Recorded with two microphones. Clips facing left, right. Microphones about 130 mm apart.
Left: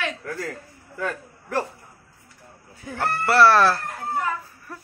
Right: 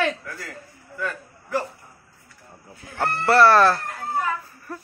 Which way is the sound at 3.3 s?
Centre (ahead or behind).